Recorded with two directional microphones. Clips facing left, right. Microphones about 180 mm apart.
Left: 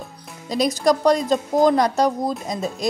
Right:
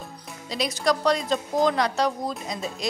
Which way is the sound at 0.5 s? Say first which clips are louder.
Left 6 dB; 45° left (ahead or behind).